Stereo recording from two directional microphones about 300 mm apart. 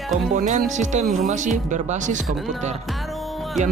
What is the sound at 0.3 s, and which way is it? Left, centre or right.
Speech, right.